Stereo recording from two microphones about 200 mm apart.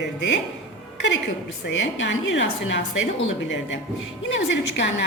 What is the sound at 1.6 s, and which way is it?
A woman's voice, 65° left (ahead or behind).